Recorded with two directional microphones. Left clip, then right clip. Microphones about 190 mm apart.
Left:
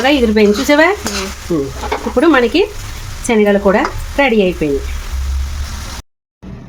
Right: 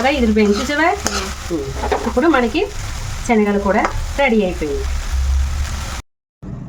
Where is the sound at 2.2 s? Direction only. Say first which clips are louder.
Left 7 dB; 45° left (ahead or behind).